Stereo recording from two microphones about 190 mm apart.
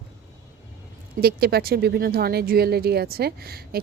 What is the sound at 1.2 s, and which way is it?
A woman's voice, 55° right (ahead or behind).